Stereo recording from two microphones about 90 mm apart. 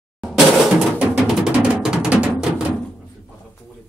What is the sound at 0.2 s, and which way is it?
Drum, 5° right (ahead or behind).